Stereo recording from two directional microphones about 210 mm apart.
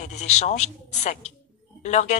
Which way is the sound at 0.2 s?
30° left (ahead or behind).